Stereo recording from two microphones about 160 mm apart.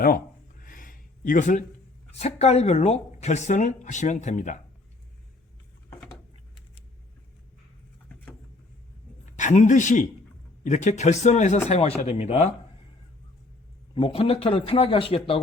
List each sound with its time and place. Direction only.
0.6 s a sound: 60° left (ahead or behind)
2.1 s speech: 40° left (ahead or behind)
9.3 s a man's voice: 50° left (ahead or behind)
13.9 s a man's voice: 35° left (ahead or behind)